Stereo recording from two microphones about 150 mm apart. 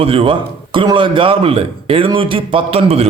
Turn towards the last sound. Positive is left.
turn(degrees=-40)  # may be behind; listen again after turning